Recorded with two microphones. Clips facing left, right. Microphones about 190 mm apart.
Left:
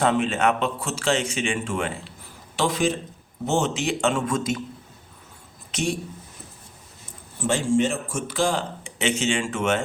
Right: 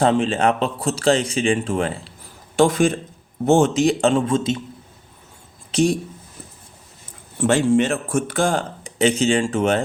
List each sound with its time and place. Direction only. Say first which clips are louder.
0.0 s speech: right 4 dB; 30° right (ahead or behind)
2.6 s speech: right 7 dB; 50° right (ahead or behind)
3.8 s a man's voice: right 6 dB; 35° right (ahead or behind)
5.7 s speech: right 8 dB; 35° right (ahead or behind)
7.4 s speech: right 5 dB; 65° right (ahead or behind); by 9.8 s 35° right (ahead or behind)